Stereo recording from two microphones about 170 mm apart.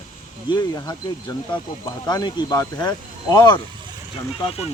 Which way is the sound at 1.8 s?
20° left (ahead or behind).